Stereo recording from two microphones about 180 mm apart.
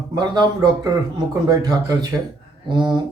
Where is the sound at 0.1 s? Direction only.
20° right (ahead or behind).